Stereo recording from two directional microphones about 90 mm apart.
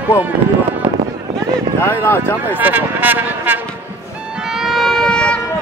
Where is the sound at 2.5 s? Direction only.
20° right (ahead or behind).